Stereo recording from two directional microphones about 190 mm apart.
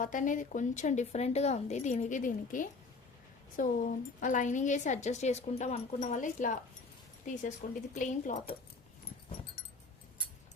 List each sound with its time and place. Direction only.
0.0 s a woman's voice: 45° left (ahead or behind)
7.6 s a woman's voice: 40° left (ahead or behind)